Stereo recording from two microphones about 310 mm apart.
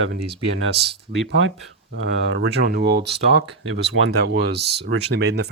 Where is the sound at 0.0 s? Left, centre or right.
Right.